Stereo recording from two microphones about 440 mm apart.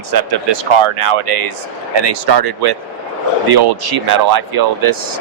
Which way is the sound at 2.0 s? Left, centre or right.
Right.